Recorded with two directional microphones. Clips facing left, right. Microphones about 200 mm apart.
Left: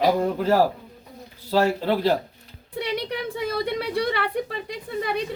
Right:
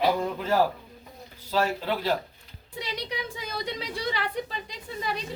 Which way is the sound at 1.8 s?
40° left (ahead or behind).